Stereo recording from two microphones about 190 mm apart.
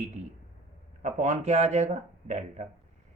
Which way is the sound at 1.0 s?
40° right (ahead or behind).